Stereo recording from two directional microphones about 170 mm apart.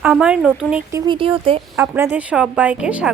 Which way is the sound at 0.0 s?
5° right (ahead or behind).